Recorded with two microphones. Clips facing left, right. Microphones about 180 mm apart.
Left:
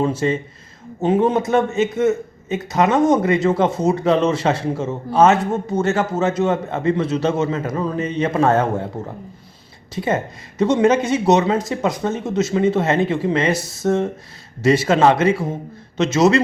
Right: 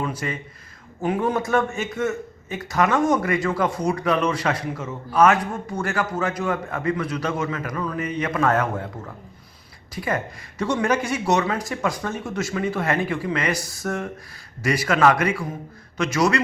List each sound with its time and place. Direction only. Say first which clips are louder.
0.0 s a man's voice: left 9 dB; 25° left (ahead or behind)